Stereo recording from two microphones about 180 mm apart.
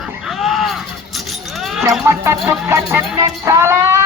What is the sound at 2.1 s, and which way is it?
Music, 15° right (ahead or behind).